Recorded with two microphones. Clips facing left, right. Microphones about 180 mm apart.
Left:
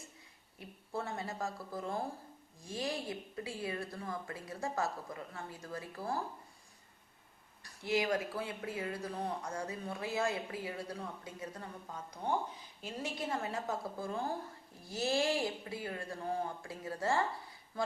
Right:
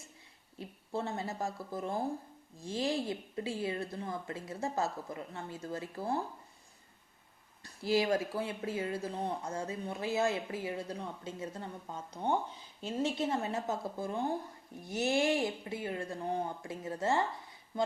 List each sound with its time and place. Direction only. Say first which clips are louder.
0.6 s speech: right 3 dB; 25° right (ahead or behind)
7.6 s speech: right 4 dB; 30° right (ahead or behind)